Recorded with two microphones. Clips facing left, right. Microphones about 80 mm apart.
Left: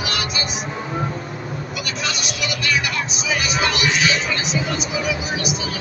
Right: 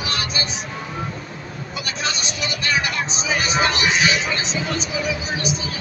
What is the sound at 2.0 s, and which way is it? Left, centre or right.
Music, right.